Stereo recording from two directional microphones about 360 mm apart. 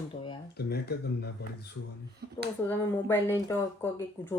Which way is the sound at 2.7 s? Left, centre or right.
Centre.